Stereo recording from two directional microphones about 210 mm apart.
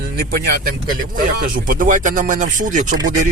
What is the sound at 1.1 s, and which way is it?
Speech, 45° right (ahead or behind).